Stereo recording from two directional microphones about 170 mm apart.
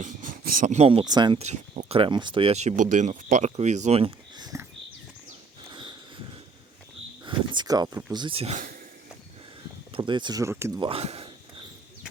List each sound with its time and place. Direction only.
0.0 s speech: 50° right (ahead or behind); by 1.4 s 25° right (ahead or behind)
1.4 s speech: 45° right (ahead or behind)
2.0 s speech: 25° right (ahead or behind)
4.4 s horse: 20° right (ahead or behind)
7.3 s a sound: 25° right (ahead or behind)
8.1 s speech: 30° right (ahead or behind)
9.9 s speech: 25° right (ahead or behind)
10.8 s speech: 35° right (ahead or behind)